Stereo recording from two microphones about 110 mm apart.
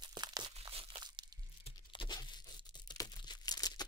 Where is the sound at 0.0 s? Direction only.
40° right (ahead or behind).